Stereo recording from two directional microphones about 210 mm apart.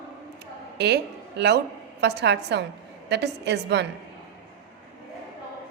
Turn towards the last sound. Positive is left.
turn(degrees=-55)  # may be behind; listen again after turning